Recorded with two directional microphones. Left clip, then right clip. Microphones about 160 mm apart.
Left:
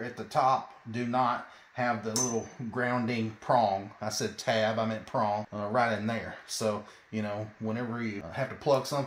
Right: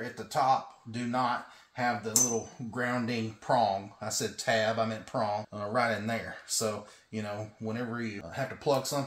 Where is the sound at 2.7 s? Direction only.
40° left (ahead or behind).